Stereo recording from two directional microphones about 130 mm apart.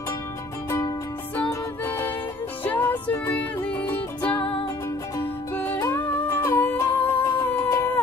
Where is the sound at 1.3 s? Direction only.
15° left (ahead or behind).